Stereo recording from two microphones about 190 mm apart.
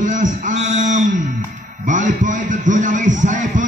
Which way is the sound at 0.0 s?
40° right (ahead or behind).